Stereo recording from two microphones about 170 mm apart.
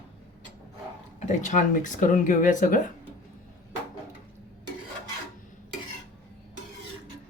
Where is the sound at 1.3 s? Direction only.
45° left (ahead or behind).